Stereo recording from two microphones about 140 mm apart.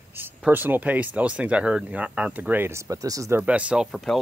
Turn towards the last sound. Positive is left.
turn(degrees=0)  # may be behind; listen again after turning